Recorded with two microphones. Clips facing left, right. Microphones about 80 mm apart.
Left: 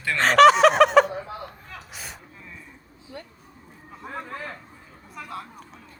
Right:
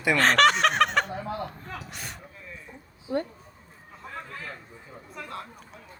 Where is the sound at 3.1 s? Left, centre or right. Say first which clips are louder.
Right 12 dB; right.